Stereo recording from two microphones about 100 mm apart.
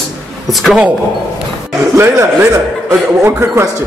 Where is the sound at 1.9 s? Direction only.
25° right (ahead or behind).